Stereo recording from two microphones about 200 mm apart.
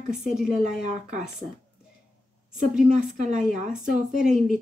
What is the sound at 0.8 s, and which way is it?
Speech, 35° right (ahead or behind).